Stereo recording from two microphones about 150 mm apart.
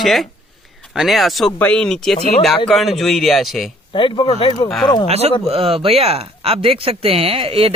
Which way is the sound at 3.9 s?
35° left (ahead or behind).